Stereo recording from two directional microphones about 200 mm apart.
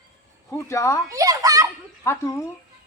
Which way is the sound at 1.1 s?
15° right (ahead or behind).